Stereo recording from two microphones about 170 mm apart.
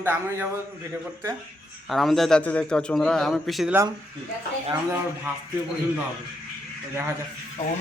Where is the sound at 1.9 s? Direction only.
Centre (ahead or behind).